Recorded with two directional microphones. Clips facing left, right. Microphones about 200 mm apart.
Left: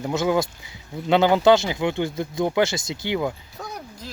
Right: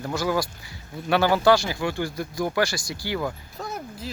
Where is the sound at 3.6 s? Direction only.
5° right (ahead or behind).